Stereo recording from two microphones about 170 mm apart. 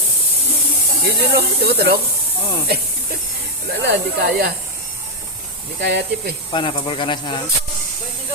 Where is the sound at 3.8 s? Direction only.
75° right (ahead or behind).